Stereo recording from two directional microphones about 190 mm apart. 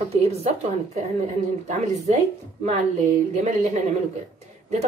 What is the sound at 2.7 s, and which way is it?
Speech, 40° right (ahead or behind).